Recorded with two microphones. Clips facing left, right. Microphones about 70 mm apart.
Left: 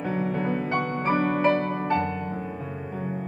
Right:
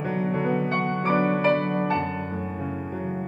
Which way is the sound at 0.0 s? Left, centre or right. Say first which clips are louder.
Right 1 dB; centre.